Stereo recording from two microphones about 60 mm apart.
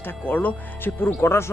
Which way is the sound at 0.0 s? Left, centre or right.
Left.